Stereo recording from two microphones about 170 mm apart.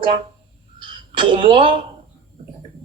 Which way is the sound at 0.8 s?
30° right (ahead or behind).